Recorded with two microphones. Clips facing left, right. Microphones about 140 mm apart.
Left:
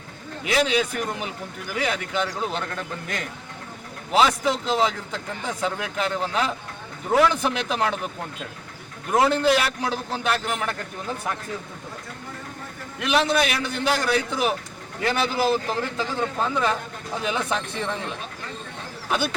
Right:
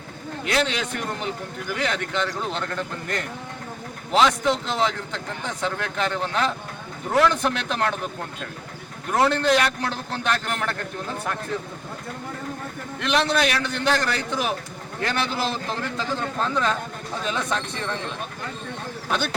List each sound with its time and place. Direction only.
0.4 s speech: 5° left (ahead or behind)
4.1 s a man's voice: 5° left (ahead or behind)
9.1 s a man's voice: 5° left (ahead or behind)
13.0 s speech: 5° left (ahead or behind)